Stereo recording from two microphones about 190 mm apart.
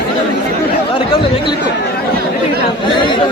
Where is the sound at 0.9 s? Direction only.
25° left (ahead or behind).